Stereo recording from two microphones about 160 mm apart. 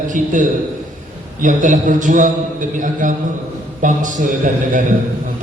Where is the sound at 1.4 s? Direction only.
55° right (ahead or behind).